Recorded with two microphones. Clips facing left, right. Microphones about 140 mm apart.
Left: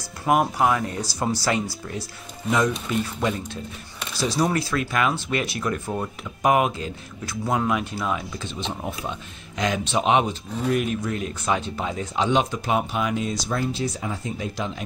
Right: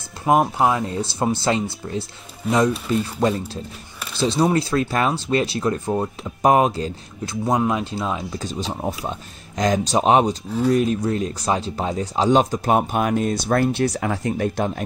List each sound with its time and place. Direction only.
0.2 s speech: 25° right (ahead or behind)
8.4 s speech: 40° right (ahead or behind); by 14.7 s 55° right (ahead or behind)